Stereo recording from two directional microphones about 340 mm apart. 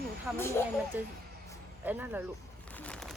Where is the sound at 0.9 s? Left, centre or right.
Centre.